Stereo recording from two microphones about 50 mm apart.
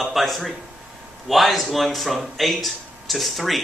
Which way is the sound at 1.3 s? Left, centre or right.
Centre.